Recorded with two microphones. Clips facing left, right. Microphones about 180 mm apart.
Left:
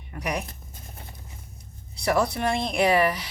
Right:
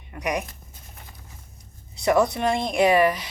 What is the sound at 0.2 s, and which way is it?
Speech, 20° right (ahead or behind).